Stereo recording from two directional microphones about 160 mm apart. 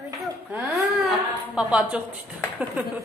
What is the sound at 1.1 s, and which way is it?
Speech, 5° right (ahead or behind).